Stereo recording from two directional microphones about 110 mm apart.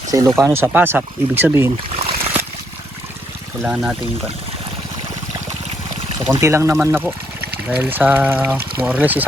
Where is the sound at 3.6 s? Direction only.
15° right (ahead or behind).